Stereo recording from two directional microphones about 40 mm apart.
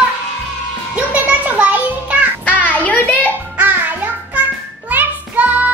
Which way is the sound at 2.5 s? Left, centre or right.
Left.